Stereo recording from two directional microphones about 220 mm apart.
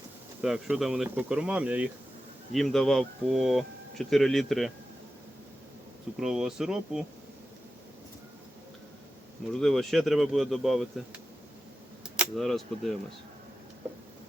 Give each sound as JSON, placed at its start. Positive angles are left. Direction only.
{"t": 0.4, "sound": "speech", "side_deg": 0}
{"t": 6.1, "sound": "speech", "side_deg": -5}
{"t": 9.5, "sound": "speech", "side_deg": 0}